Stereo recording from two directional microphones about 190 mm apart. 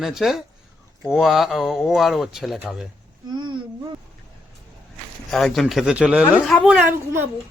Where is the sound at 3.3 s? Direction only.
25° right (ahead or behind).